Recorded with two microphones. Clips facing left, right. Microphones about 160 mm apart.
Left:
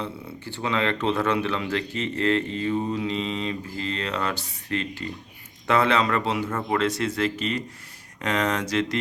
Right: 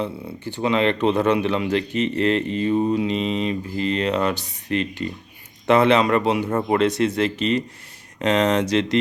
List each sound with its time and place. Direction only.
0.0 s speech: 15° right (ahead or behind)
6.5 s speech: 30° right (ahead or behind)
6.7 s speech: 20° right (ahead or behind)